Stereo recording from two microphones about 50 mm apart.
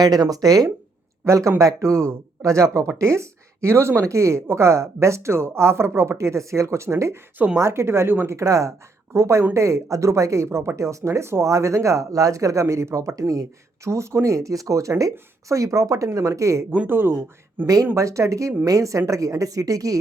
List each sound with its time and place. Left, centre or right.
1.2 s a woman's voice: right
3.0 s speech: right
8.3 s a woman's voice: right
9.1 s speech: right
13.8 s a woman's voice: right
16.9 s speech: right
17.9 s a woman's voice: right